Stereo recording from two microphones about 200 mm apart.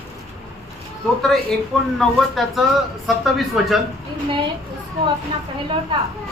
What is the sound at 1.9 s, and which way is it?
Speech, centre (ahead or behind).